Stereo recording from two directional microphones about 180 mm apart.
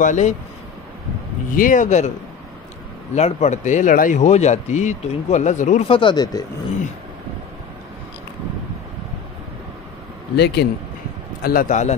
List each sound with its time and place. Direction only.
0.0 s speech: 45° left (ahead or behind)
1.6 s speech: 45° left (ahead or behind)
3.2 s speech: 40° left (ahead or behind)
5.9 s speech: 25° left (ahead or behind)
10.3 s speech: 70° left (ahead or behind)
11.4 s speech: 50° left (ahead or behind)